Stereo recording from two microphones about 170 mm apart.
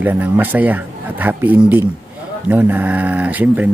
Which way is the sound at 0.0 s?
10° right (ahead or behind).